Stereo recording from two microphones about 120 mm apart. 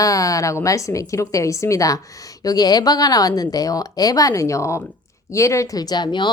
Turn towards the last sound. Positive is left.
turn(degrees=40)  # may be behind; listen again after turning